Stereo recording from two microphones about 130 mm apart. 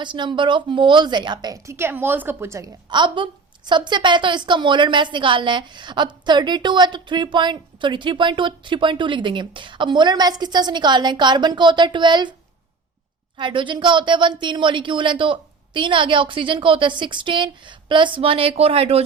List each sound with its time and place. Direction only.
0.0 s a woman's voice: 35° right (ahead or behind); by 2.6 s 20° right (ahead or behind)
2.9 s a woman's voice: 35° right (ahead or behind)
13.3 s a woman's voice: 40° right (ahead or behind)